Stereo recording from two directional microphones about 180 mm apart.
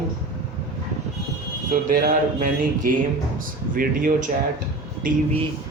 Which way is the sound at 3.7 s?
50° right (ahead or behind).